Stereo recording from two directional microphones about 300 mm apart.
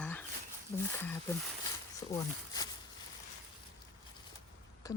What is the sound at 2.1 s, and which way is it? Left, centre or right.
Speech, centre.